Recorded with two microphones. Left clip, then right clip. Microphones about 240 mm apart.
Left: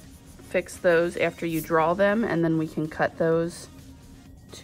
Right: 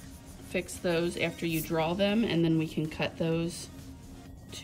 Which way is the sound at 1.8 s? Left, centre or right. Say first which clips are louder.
Left 6 dB; centre.